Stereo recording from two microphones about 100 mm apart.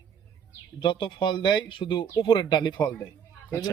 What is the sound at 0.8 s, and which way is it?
Speech, 55° left (ahead or behind).